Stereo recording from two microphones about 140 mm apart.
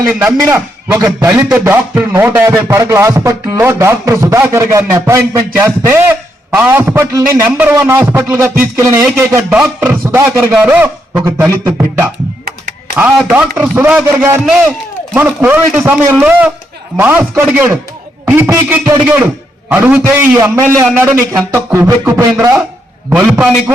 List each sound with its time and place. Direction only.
0.1 s music: 15° right (ahead or behind)
13.3 s music: 10° right (ahead or behind)
23.0 s music: 5° right (ahead or behind)